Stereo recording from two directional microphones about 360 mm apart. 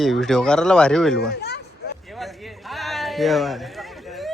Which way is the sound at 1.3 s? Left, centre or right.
Left.